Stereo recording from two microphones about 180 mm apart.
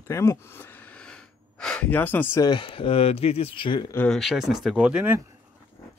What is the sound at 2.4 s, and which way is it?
Speech, 25° left (ahead or behind).